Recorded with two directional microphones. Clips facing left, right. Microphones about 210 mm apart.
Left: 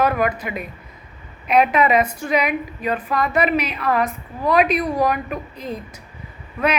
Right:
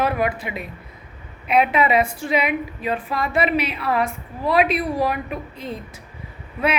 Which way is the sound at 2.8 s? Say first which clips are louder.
Left 5 dB; 40° left (ahead or behind).